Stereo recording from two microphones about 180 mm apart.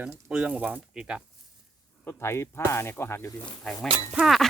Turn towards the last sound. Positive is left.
turn(degrees=0)  # may be behind; listen again after turning